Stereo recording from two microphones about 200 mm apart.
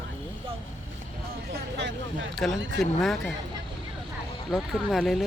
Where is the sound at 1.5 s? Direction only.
55° right (ahead or behind).